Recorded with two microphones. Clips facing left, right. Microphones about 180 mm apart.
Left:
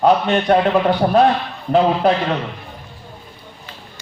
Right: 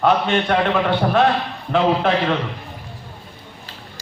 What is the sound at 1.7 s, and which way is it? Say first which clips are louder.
Speech: left 3 dB; 35° left (ahead or behind).